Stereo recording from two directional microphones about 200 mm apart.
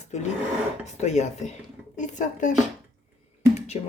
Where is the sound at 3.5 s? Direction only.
35° left (ahead or behind).